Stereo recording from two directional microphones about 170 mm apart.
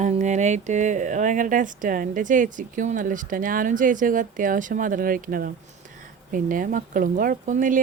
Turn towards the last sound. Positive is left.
turn(degrees=-50)  # may be behind; listen again after turning